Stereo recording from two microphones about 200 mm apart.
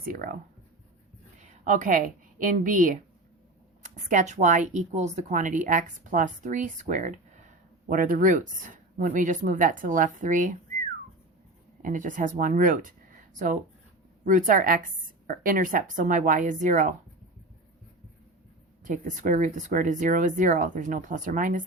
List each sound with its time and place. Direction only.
0.0 s a woman's voice: 45° right (ahead or behind)
1.4 s a woman's voice: 40° right (ahead or behind)
11.8 s speech: 40° right (ahead or behind)
14.3 s a woman's voice: 40° right (ahead or behind)
18.9 s speech: 40° right (ahead or behind)